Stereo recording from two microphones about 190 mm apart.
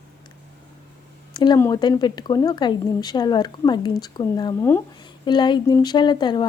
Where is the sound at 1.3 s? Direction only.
20° left (ahead or behind).